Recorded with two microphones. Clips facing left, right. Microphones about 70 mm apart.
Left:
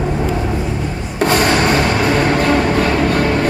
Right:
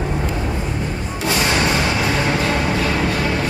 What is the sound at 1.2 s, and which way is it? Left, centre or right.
Music, left.